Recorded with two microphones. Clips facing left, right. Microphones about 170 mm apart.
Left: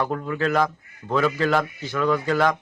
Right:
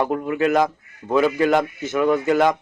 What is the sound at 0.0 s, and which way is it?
A man's voice, 15° right (ahead or behind).